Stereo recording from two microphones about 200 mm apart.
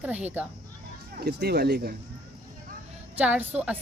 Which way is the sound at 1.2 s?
55° right (ahead or behind).